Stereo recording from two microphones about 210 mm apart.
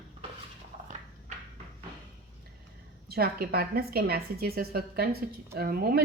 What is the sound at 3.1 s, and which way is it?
A woman's voice, 45° right (ahead or behind).